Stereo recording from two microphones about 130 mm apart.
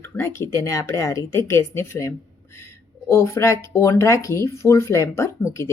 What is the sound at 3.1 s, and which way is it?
Speech, 20° left (ahead or behind).